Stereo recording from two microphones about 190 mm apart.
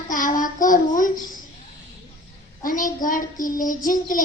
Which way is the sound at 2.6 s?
45° left (ahead or behind).